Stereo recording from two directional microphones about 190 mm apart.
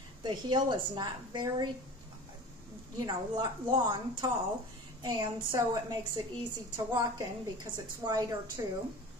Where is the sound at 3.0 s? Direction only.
25° right (ahead or behind).